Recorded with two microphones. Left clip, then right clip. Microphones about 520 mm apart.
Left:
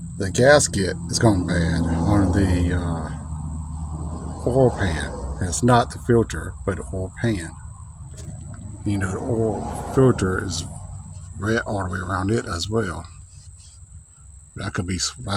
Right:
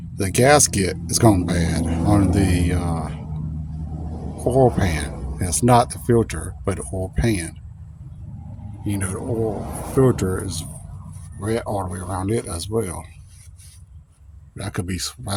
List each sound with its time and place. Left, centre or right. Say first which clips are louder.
0.2 s speech: even; right
4.5 s speech: right 2 dB; right
8.8 s speech: left 1 dB; right
14.5 s speech: left 1 dB; right